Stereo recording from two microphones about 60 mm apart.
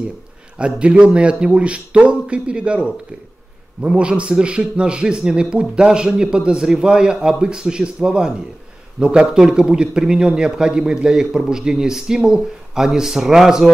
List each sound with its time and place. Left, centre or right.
0.6 s a man's voice: centre